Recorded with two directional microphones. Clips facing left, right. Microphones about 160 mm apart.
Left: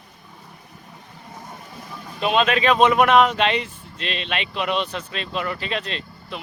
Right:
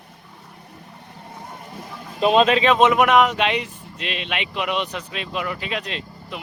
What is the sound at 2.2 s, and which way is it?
Speech, 35° right (ahead or behind).